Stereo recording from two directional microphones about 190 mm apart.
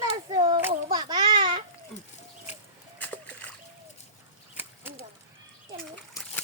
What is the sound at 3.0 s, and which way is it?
Splash, 10° left (ahead or behind).